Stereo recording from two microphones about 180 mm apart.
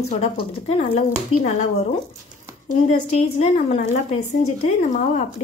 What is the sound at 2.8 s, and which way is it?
A woman's voice, 40° left (ahead or behind).